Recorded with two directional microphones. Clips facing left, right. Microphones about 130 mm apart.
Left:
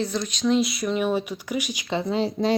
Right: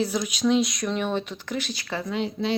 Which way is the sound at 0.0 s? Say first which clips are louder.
Right 1 dB; 10° right (ahead or behind).